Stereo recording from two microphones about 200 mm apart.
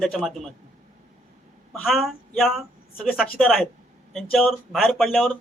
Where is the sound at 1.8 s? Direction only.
Centre (ahead or behind).